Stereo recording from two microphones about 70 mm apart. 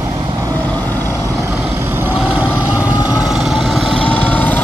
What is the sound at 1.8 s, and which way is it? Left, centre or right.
Vehicle, right.